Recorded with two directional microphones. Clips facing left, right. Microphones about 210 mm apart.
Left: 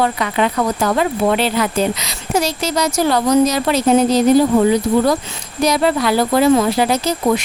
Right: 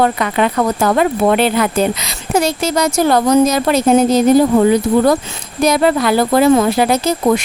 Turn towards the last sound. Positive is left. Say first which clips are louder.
# right 2 dB
turn(degrees=-50)  # may be behind; listen again after turning